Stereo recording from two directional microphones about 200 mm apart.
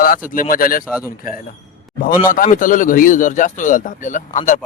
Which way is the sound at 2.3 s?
40° left (ahead or behind).